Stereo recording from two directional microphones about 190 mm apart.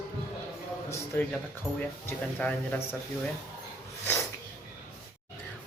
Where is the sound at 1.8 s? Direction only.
5° left (ahead or behind).